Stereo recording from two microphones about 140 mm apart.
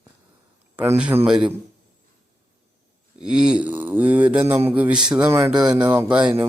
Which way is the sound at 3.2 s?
5° right (ahead or behind).